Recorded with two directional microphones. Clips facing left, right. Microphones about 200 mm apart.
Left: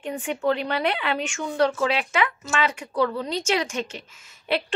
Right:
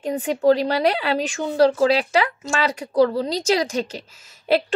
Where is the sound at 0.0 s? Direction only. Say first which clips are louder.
Right 6 dB; 35° right (ahead or behind).